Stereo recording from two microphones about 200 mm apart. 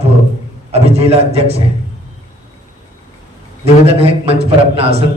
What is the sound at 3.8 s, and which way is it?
A man's voice, 30° right (ahead or behind).